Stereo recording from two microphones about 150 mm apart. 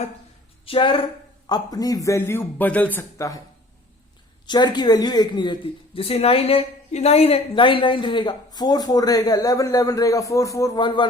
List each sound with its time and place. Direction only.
0.6 s a woman's voice: 35° left (ahead or behind)
1.5 s a man's voice: 25° left (ahead or behind)
4.4 s a man's voice: 30° left (ahead or behind)